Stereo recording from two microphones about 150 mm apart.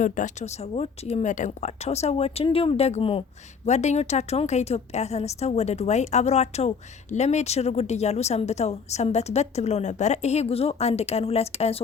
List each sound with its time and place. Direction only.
0.0 s a woman's voice: 55° left (ahead or behind); by 3.2 s 40° left (ahead or behind)
3.7 s a woman's voice: 50° left (ahead or behind)